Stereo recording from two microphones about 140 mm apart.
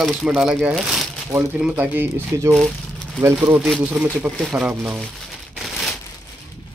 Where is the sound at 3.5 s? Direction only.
Centre (ahead or behind).